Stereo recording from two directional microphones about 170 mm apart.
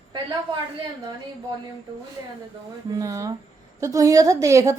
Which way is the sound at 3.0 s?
20° right (ahead or behind).